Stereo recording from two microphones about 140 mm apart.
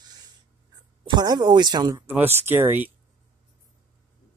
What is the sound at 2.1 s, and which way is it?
Speech, 15° right (ahead or behind).